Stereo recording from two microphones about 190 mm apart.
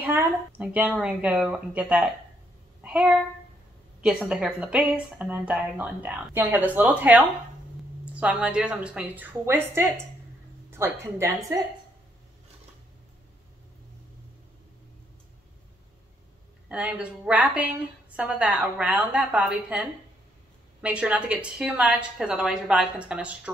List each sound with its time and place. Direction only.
0.0 s a woman's voice: 10° right (ahead or behind)
16.6 s a woman's voice: 5° right (ahead or behind)